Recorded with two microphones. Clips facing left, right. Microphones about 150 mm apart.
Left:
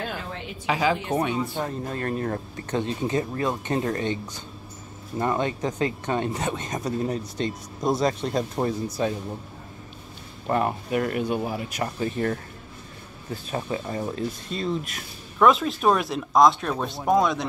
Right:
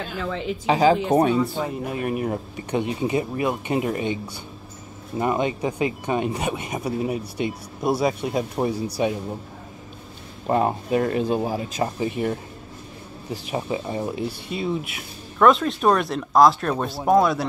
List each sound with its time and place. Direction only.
0.5 s a woman's voice: 30° right (ahead or behind)
1.6 s speech: 10° right (ahead or behind)
8.7 s speech: 70° right (ahead or behind)
10.4 s speech: 20° right (ahead or behind); by 17.5 s 5° right (ahead or behind)